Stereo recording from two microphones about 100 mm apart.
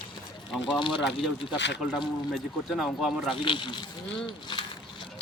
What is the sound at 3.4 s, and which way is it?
Speech, 55° left (ahead or behind).